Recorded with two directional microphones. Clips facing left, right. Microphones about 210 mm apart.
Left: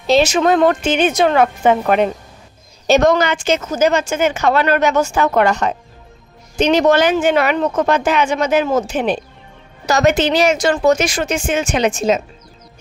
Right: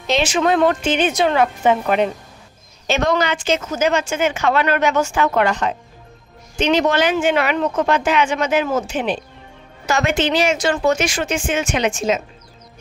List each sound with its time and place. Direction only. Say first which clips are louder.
0.0 s a woman's voice: left 5 dB; 40° left (ahead or behind)